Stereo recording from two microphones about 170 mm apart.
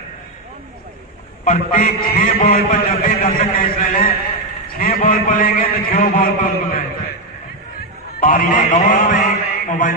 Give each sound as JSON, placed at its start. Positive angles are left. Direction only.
{"t": 1.4, "sound": "a man's voice", "side_deg": 50}
{"t": 8.2, "sound": "a man's voice", "side_deg": 55}